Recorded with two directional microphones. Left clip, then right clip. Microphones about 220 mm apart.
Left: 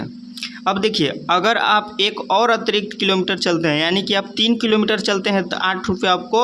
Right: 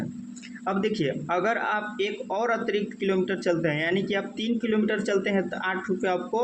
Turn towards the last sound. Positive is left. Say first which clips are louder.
# left 9 dB
turn(degrees=40)  # may be behind; listen again after turning